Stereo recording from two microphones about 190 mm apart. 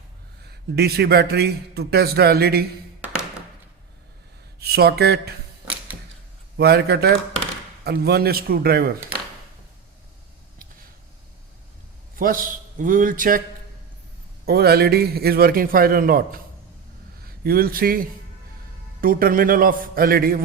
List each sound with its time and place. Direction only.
0.8 s a man's voice: 55° right (ahead or behind)
4.6 s speech: 55° right (ahead or behind)
5.6 s arrow: 10° right (ahead or behind)
6.6 s a man's voice: 60° right (ahead or behind)
12.1 s a man's voice: 45° right (ahead or behind)
14.4 s a man's voice: 55° right (ahead or behind)